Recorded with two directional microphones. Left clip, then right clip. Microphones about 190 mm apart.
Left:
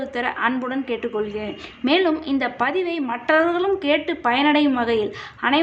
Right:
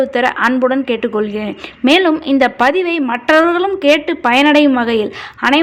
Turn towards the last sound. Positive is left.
turn(degrees=-35)  # may be behind; listen again after turning